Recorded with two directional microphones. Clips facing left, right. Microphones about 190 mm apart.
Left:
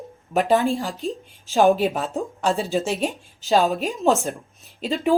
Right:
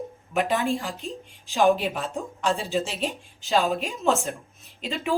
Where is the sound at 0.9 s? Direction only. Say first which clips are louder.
Left 6 dB; centre (ahead or behind).